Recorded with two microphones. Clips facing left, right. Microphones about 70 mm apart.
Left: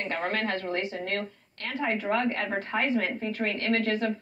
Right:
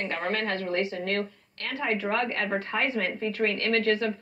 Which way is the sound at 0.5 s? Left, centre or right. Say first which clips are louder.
Right 2 dB; right.